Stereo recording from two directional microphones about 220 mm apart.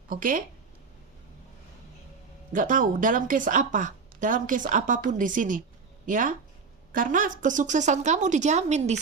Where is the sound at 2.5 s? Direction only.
35° right (ahead or behind).